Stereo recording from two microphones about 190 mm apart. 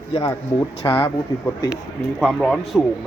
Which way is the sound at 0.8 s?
10° left (ahead or behind).